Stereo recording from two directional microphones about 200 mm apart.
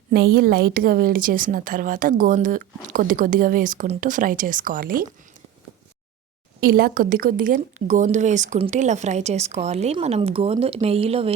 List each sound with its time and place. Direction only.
0.1 s a woman's voice: 50° right (ahead or behind)
6.6 s speech: 45° right (ahead or behind); by 11.3 s 30° right (ahead or behind)